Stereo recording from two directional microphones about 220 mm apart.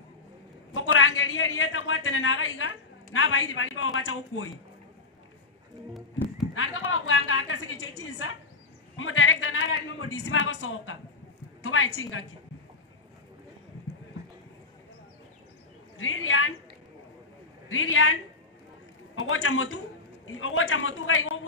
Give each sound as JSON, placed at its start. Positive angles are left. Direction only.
{"t": 0.7, "sound": "a man's voice", "side_deg": 65}
{"t": 6.5, "sound": "a man's voice", "side_deg": 65}
{"t": 16.0, "sound": "a man's voice", "side_deg": 65}
{"t": 17.6, "sound": "a man's voice", "side_deg": 65}